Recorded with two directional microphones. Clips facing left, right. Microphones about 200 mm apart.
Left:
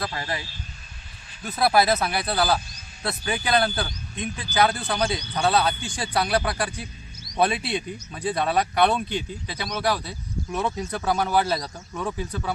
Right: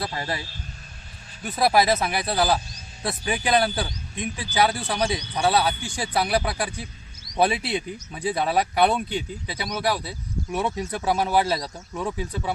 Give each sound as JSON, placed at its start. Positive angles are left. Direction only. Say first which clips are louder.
{"t": 0.0, "sound": "a man's voice", "louder": "right 1 dB", "side_deg": -30}
{"t": 1.5, "sound": "speech", "louder": "even", "side_deg": 0}
{"t": 3.0, "sound": "speech", "louder": "right 1 dB", "side_deg": -15}